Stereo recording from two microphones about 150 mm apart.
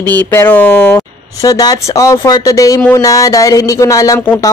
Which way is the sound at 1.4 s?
25° left (ahead or behind).